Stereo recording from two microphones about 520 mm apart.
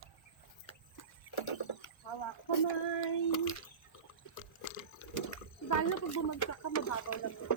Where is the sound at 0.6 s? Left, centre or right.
Left.